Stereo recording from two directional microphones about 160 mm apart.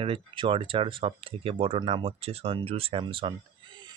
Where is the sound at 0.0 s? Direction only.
35° right (ahead or behind).